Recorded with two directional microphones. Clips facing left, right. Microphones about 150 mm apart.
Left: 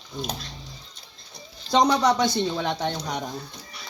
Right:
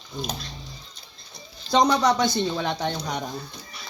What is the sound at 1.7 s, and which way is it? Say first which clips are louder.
Speech: even; 10° left (ahead or behind).